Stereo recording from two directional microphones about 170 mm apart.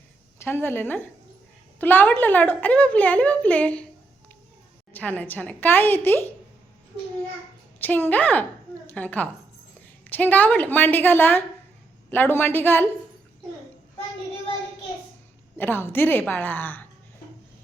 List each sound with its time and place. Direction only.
0.3 s a woman's voice: 10° left (ahead or behind)
4.9 s a woman's voice: 10° left (ahead or behind)
7.8 s a woman's voice: 10° left (ahead or behind)
15.5 s a woman's voice: 10° left (ahead or behind)